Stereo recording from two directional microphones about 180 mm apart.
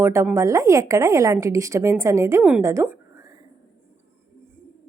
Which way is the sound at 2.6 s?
15° right (ahead or behind).